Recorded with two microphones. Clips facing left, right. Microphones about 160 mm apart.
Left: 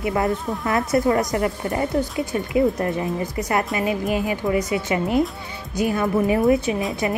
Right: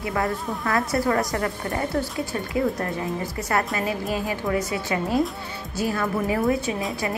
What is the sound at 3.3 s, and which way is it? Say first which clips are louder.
A woman's voice: left 2 dB; 15° left (ahead or behind).